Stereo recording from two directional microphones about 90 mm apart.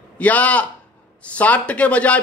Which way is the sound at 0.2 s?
15° left (ahead or behind).